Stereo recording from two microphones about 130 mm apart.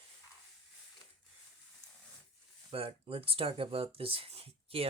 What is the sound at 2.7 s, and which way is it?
Speech, 45° right (ahead or behind).